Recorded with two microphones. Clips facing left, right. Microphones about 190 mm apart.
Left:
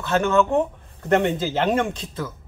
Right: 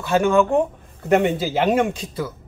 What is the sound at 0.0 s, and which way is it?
Speech, 10° right (ahead or behind).